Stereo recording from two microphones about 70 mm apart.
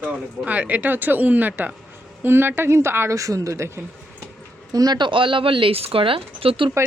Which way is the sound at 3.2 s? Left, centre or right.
Right.